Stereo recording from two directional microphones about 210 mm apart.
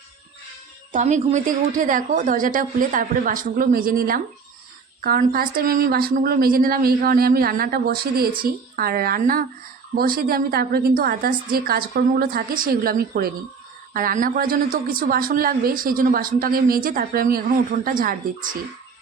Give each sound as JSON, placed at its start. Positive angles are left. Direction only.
{"t": 0.9, "sound": "a woman's voice", "side_deg": -35}